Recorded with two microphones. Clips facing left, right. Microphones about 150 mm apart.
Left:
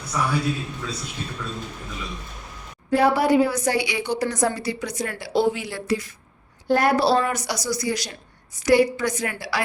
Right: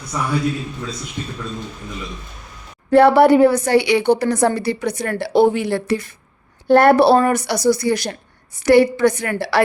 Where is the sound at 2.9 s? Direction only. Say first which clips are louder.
Right 8 dB; 65° right (ahead or behind).